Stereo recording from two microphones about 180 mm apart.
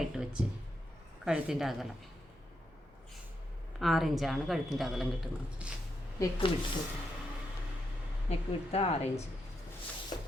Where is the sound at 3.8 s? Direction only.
Centre (ahead or behind).